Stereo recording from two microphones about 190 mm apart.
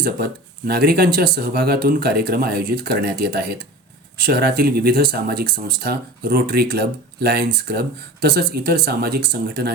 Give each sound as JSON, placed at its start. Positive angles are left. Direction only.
{"t": 0.7, "sound": "speech", "side_deg": -55}